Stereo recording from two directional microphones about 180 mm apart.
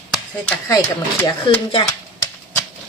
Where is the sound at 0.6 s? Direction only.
20° left (ahead or behind).